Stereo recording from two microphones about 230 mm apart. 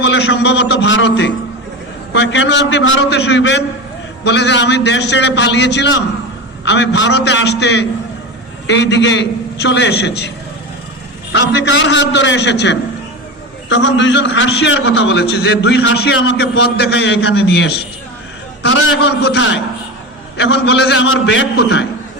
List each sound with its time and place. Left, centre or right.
0.0 s a man's voice: left
18.6 s a man's voice: left